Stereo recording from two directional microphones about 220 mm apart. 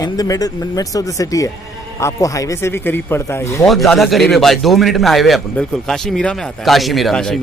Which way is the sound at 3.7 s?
Centre (ahead or behind).